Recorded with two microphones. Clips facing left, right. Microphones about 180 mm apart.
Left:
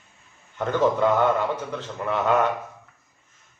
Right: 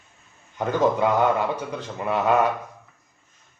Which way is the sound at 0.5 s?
10° right (ahead or behind).